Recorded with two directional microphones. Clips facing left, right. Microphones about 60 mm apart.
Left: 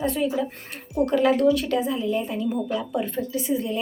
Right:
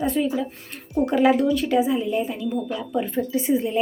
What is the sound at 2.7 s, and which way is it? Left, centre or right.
Speech, centre.